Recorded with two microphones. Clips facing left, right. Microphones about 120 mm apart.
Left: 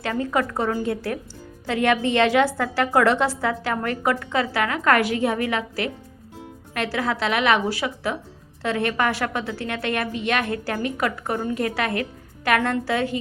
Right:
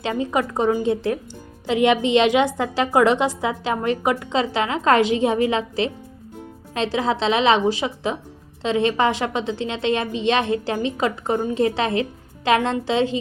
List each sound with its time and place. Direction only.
0.0 s a woman's voice: 20° right (ahead or behind)